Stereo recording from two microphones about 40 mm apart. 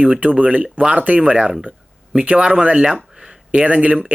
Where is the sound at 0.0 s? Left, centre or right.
Right.